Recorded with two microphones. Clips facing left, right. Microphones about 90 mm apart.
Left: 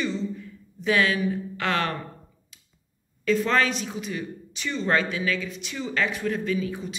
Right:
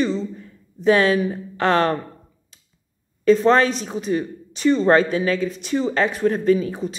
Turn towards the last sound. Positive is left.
turn(degrees=-40)  # may be behind; listen again after turning